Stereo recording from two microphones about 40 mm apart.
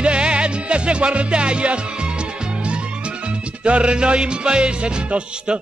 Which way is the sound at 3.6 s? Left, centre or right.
Right.